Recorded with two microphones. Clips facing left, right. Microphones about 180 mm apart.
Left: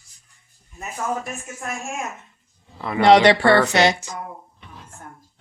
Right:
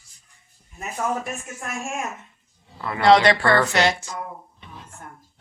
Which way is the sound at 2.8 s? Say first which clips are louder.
Left 2 dB; 20° left (ahead or behind).